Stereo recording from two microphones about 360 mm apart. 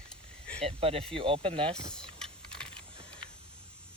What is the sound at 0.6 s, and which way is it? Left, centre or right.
Speech, centre.